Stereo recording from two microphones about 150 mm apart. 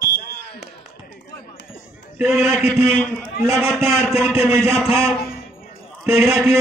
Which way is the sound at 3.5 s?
5° right (ahead or behind).